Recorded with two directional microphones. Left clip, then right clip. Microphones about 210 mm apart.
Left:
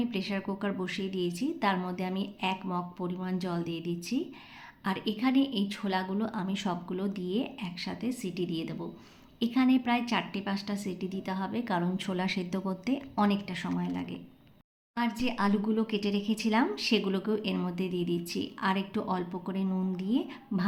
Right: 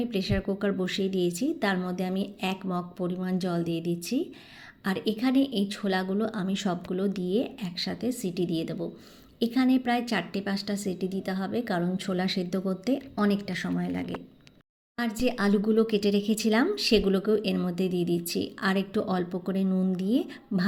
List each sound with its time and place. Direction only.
0.0 s speech: 10° right (ahead or behind)